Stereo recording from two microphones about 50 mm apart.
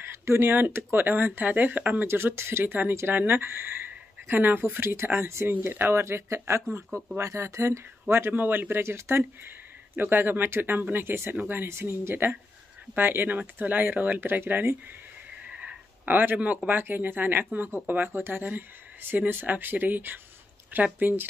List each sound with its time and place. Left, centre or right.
0.0 s a sound: right
0.5 s speech: right
1.4 s speech: right
2.0 s speech: right
8.1 s speech: right
8.4 s speech: right
8.8 s speech: right
9.9 s speech: right
12.9 s speech: right
14.4 s speech: right
15.4 s sniff: right
16.1 s speech: right